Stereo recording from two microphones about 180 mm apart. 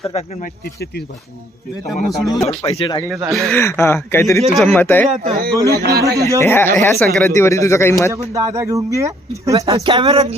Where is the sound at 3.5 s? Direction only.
15° left (ahead or behind).